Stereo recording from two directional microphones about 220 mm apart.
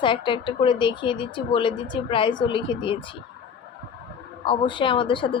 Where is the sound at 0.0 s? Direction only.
20° left (ahead or behind).